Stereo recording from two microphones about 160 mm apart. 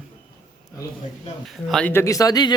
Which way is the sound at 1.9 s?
20° left (ahead or behind).